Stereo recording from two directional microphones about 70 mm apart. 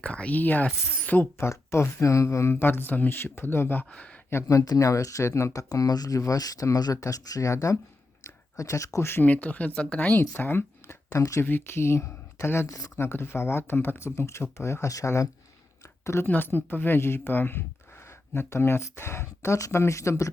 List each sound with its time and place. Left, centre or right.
0.0 s speech: centre
1.4 s speech: left
2.6 s speech: left
4.3 s speech: left
8.2 s a sound: left
9.0 s speech: left
10.3 s speech: left
11.4 s speech: left
16.2 s speech: left